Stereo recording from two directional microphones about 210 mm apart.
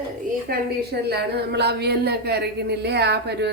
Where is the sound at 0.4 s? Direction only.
50° right (ahead or behind).